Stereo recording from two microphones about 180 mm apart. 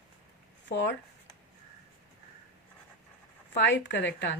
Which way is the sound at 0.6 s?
75° left (ahead or behind).